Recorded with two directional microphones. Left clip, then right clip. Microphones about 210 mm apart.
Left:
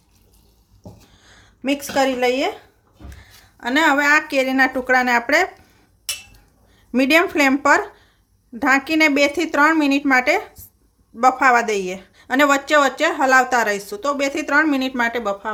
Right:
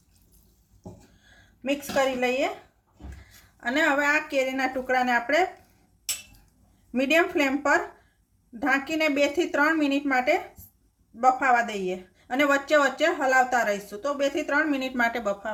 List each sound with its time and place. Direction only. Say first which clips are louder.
1.6 s a woman's voice: left 6 dB; 50° left (ahead or behind)
3.6 s a woman's voice: left 7 dB; 50° left (ahead or behind); by 5.5 s 35° left (ahead or behind)
6.9 s a woman's voice: left 7 dB; 35° left (ahead or behind)